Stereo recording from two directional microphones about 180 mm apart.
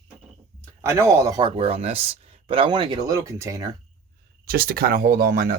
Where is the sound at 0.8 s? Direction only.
15° right (ahead or behind).